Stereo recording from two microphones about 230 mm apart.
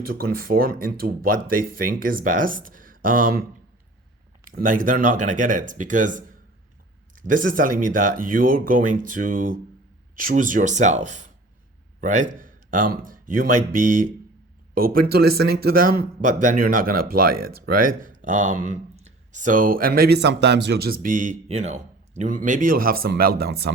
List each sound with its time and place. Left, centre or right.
0.0 s speech: right
4.4 s speech: right